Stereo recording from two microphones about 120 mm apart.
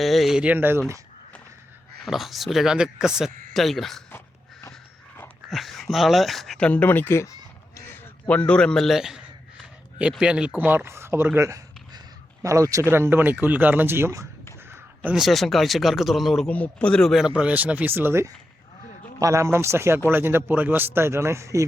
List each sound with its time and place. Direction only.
0.0 s speech: centre (ahead or behind); by 0.9 s 20° right (ahead or behind)
2.0 s a man's voice: centre (ahead or behind)
5.5 s a man's voice: centre (ahead or behind); by 7.3 s 20° left (ahead or behind)
8.3 s a man's voice: 10° left (ahead or behind); by 14.3 s 25° right (ahead or behind)
15.1 s a man's voice: centre (ahead or behind); by 21.6 s 25° right (ahead or behind)